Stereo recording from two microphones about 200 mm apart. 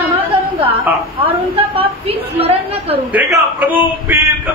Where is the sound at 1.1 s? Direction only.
25° right (ahead or behind).